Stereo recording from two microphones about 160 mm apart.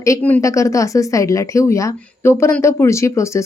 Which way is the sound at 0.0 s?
15° left (ahead or behind).